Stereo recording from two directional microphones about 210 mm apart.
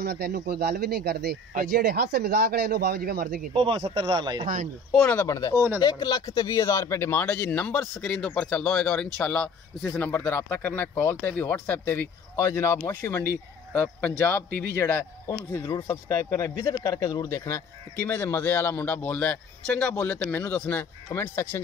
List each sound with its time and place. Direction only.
0.0 s speech: 50° right (ahead or behind)
3.5 s speech: 25° right (ahead or behind)
4.9 s speech: 10° left (ahead or behind)